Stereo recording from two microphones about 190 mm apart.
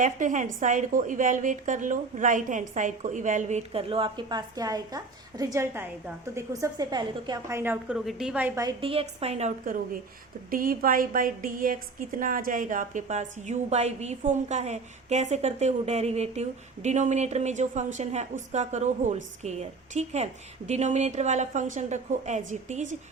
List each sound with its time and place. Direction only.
0.0 s a woman's voice: 40° right (ahead or behind); by 8.7 s 15° right (ahead or behind)
8.8 s a woman's voice: 30° right (ahead or behind)